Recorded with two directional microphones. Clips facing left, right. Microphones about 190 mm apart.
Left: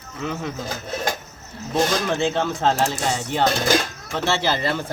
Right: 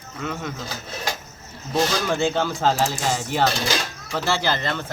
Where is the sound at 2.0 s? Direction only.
Centre (ahead or behind).